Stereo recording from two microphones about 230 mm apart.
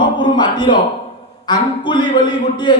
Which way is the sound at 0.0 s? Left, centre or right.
Centre.